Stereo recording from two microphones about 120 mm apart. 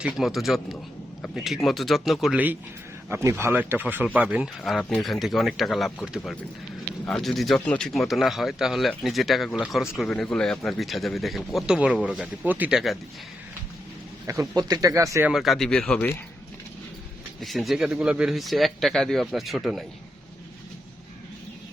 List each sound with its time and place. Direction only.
0.0 s speech: 5° right (ahead or behind)
2.3 s speech: 15° right (ahead or behind)
7.1 s speech: centre (ahead or behind)
14.3 s speech: 30° right (ahead or behind)
15.3 s speech: centre (ahead or behind)
17.4 s speech: centre (ahead or behind)